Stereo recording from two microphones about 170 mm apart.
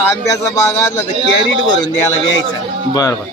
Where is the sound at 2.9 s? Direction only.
20° left (ahead or behind).